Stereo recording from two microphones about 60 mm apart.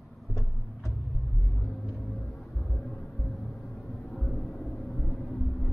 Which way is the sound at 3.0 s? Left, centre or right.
Centre.